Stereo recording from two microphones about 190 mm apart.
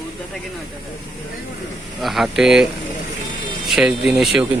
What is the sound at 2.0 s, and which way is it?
Speech, centre (ahead or behind).